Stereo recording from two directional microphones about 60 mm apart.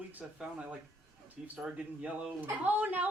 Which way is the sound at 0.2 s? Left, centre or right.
Centre.